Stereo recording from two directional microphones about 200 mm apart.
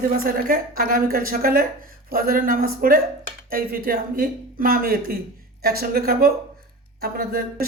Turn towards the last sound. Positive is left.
turn(degrees=-50)  # may be behind; listen again after turning